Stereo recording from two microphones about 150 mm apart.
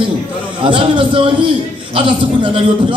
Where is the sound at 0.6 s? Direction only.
35° right (ahead or behind).